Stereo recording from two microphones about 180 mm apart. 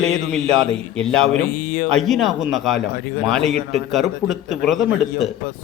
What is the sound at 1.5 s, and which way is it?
Speech, 50° left (ahead or behind).